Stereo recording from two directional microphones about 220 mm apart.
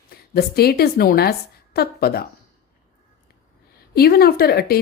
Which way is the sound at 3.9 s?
45° left (ahead or behind).